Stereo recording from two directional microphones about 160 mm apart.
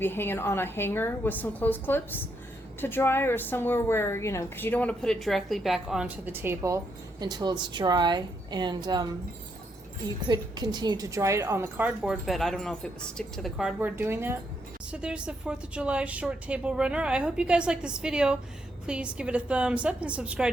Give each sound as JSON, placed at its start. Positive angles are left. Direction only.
{"t": 0.0, "sound": "a woman's voice", "side_deg": 15}
{"t": 10.2, "sound": "a woman's voice", "side_deg": -25}
{"t": 11.9, "sound": "a woman's voice", "side_deg": 0}